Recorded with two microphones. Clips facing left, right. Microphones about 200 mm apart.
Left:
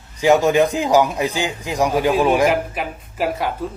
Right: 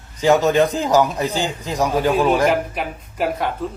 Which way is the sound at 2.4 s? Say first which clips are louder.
Left 1 dB; centre (ahead or behind).